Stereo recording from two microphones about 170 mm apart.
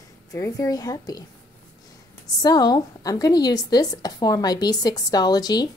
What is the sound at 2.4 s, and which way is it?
A woman's voice, 25° left (ahead or behind).